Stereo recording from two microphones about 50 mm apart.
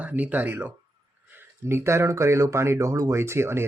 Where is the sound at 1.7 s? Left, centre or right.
Right.